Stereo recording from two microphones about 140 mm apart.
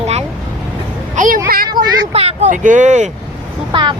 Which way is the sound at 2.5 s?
65° right (ahead or behind).